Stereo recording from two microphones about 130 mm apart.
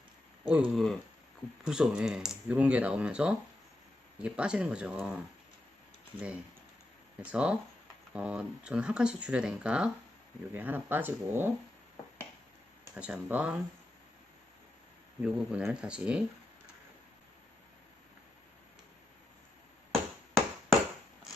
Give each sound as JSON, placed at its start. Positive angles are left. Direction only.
{"t": 0.7, "sound": "speech", "side_deg": 0}
{"t": 13.0, "sound": "speech", "side_deg": -10}
{"t": 15.2, "sound": "speech", "side_deg": -10}
{"t": 19.9, "sound": "a sound", "side_deg": 5}